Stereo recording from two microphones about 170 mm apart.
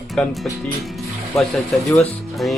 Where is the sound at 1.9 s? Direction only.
Centre (ahead or behind).